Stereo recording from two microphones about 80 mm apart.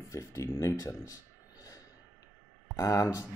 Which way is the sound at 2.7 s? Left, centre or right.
Left.